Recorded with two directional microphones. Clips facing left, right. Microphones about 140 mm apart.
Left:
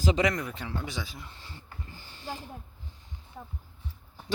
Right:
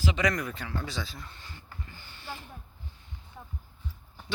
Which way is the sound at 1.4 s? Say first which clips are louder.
Even; 30° left (ahead or behind).